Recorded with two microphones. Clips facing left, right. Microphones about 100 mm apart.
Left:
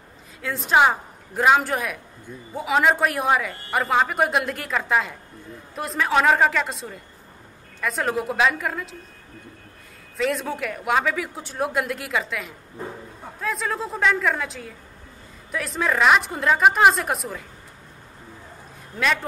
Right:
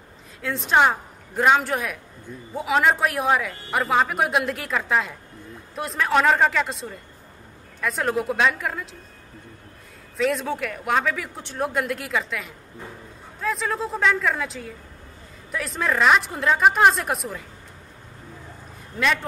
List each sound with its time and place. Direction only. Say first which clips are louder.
0.4 s speech: left 1 dB; centre (ahead or behind)
10.1 s speech: right 1 dB; centre (ahead or behind)